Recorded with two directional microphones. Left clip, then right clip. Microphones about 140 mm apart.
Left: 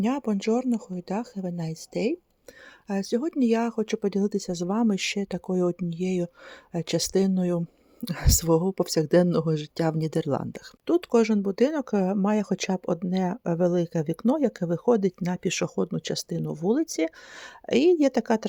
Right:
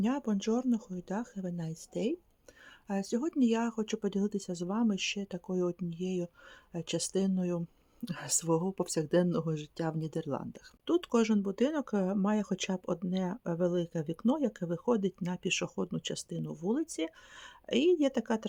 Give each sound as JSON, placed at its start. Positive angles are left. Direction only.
{"t": 0.0, "sound": "speech", "side_deg": 50}
{"t": 10.8, "sound": "speech", "side_deg": 40}